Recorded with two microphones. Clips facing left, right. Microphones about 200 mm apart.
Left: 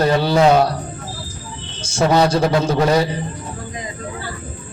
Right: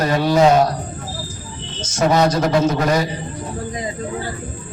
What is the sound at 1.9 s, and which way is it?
A man's voice, 30° left (ahead or behind).